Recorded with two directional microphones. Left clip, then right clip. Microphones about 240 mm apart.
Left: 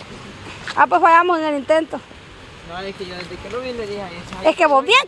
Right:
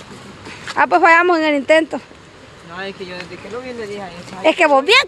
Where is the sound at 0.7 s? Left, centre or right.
Centre.